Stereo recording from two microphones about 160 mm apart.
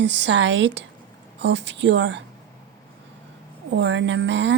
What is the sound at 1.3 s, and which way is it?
Speech, 90° right.